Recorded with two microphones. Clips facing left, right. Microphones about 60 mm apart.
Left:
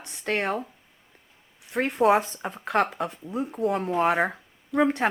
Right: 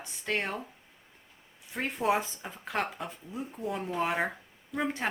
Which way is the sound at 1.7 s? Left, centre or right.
Left.